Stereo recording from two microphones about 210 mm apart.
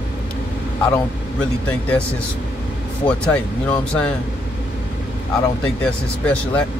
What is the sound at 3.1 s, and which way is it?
Speech, 5° left (ahead or behind).